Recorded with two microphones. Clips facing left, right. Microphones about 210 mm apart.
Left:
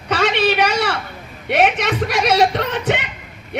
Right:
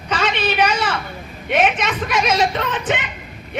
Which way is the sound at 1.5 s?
65° left (ahead or behind).